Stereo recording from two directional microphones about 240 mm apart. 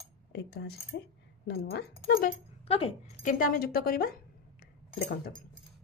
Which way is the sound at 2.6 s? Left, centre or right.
Left.